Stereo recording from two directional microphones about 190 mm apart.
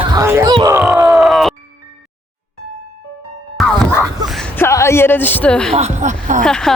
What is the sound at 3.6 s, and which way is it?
Music, 5° left (ahead or behind).